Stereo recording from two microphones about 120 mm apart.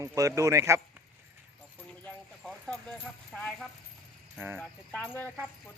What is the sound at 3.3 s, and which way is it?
Speech, 5° left (ahead or behind).